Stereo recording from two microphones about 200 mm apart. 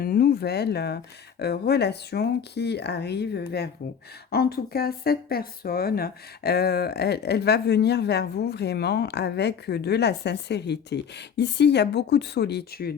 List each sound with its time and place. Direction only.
0.0 s speech: 50° left (ahead or behind)